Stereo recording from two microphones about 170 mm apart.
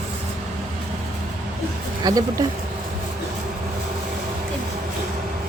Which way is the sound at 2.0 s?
20° right (ahead or behind).